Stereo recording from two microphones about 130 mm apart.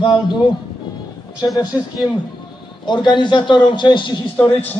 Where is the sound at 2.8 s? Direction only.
35° left (ahead or behind).